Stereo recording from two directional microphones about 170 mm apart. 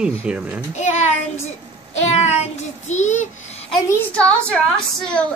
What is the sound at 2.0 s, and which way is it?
Child singing, 40° left (ahead or behind).